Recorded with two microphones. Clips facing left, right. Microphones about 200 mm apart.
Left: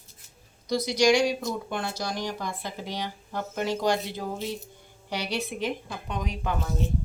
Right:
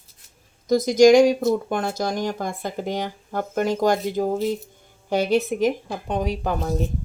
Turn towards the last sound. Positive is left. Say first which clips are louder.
# right 6 dB
turn(degrees=-35)  # may be behind; listen again after turning